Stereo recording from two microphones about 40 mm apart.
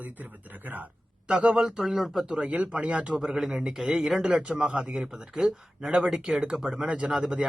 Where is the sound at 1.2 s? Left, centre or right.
Right.